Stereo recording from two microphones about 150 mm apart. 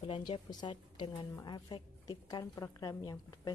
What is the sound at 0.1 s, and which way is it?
A woman's voice, 30° left (ahead or behind).